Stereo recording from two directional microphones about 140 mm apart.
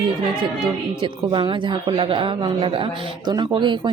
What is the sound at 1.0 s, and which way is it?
Speech, 35° right (ahead or behind).